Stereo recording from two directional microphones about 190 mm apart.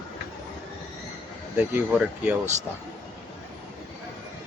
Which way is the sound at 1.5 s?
5° right (ahead or behind).